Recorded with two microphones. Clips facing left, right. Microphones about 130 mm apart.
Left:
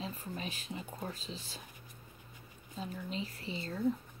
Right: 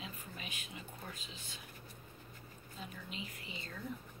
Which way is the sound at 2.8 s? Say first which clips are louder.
Left 8 dB; 35° left (ahead or behind).